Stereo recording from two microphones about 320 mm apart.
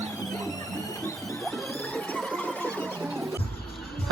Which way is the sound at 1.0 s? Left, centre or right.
Centre.